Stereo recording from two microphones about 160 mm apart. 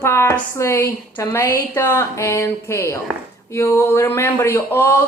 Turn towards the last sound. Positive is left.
turn(degrees=15)  # may be behind; listen again after turning